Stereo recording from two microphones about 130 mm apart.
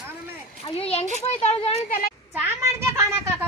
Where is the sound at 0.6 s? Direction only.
50° left (ahead or behind).